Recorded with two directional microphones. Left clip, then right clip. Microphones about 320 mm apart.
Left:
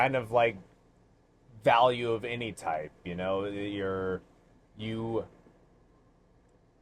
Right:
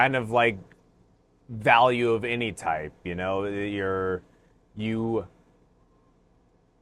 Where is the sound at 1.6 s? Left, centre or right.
Right.